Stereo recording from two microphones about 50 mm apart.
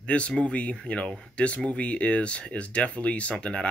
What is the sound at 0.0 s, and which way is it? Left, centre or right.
Speech, left.